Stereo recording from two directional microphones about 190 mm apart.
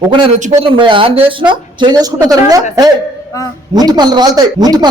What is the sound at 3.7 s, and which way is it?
Speech, 20° right (ahead or behind).